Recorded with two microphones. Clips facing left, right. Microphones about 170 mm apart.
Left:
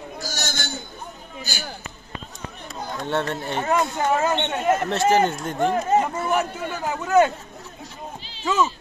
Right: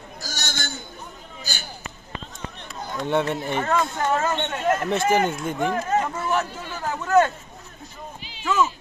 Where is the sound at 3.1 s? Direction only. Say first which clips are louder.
Right 3 dB; 10° right (ahead or behind).